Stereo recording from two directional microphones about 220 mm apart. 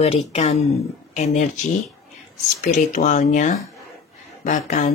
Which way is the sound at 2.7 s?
35° left (ahead or behind).